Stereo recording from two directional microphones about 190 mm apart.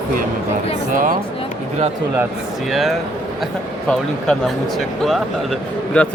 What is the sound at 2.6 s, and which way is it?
Speech, centre (ahead or behind).